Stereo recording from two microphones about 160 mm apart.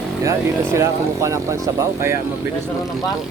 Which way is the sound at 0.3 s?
20° right (ahead or behind).